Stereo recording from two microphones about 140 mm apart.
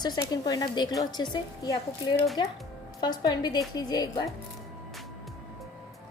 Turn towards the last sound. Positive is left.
turn(degrees=30)  # may be behind; listen again after turning